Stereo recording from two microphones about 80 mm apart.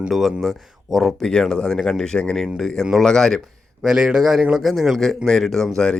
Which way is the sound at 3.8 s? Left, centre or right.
Centre.